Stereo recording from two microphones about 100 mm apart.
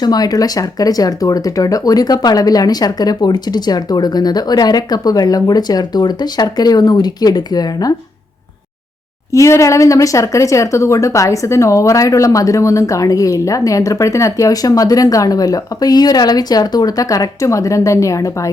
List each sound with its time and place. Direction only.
0.0 s a woman's voice: 40° left (ahead or behind)
9.3 s a woman's voice: 30° left (ahead or behind)